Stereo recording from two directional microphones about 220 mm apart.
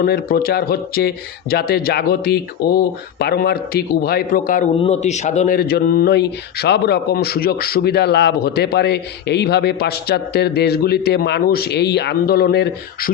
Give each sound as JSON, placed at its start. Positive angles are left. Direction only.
{"t": 0.0, "sound": "speech", "side_deg": 45}